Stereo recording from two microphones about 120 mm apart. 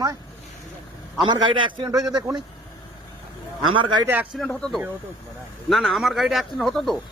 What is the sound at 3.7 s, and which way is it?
Speech, 40° right (ahead or behind).